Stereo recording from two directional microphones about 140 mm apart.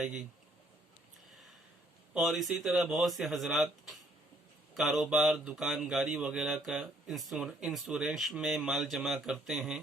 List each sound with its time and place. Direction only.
0.0 s speech: 5° right (ahead or behind)
2.1 s speech: centre (ahead or behind)
4.7 s speech: centre (ahead or behind)